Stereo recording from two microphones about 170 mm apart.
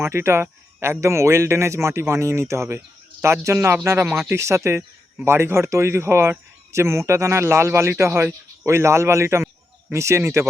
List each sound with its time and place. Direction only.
0.0 s speech: 15° right (ahead or behind)